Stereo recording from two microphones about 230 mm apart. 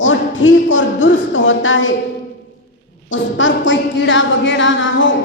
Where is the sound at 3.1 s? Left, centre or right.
Left.